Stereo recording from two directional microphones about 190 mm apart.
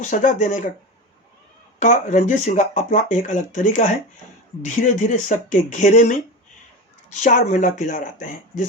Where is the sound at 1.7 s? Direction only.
40° left (ahead or behind).